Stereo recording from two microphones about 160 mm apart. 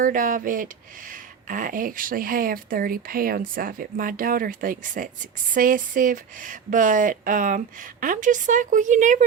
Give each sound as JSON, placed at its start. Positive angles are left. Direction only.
{"t": 0.0, "sound": "speech", "side_deg": -60}